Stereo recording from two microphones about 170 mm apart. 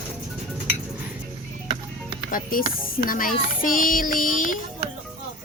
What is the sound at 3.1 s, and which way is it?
Child singing, 55° left (ahead or behind).